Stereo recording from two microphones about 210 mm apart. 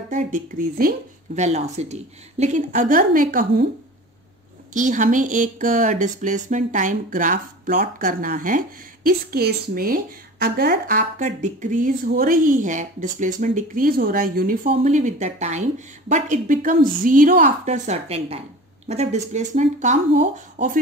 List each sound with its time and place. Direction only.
0.1 s speech: 40° right (ahead or behind)
4.7 s speech: 40° right (ahead or behind)